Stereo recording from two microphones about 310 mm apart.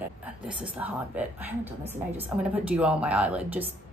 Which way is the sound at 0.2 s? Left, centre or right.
Centre.